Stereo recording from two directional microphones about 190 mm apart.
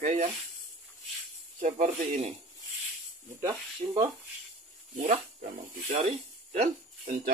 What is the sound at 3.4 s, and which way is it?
Speech, 25° right (ahead or behind).